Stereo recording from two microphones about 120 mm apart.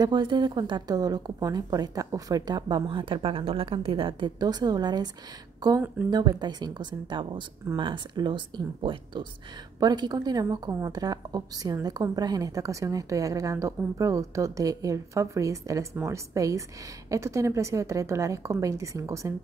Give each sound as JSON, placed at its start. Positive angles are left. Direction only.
{"t": 0.0, "sound": "a woman's voice", "side_deg": -40}